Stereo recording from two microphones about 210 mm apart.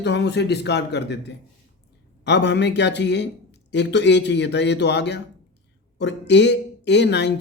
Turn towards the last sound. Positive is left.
turn(degrees=55)  # may be behind; listen again after turning